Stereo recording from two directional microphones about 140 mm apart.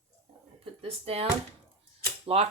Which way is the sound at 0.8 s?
45° right (ahead or behind).